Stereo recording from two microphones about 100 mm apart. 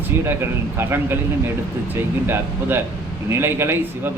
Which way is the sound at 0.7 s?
25° right (ahead or behind).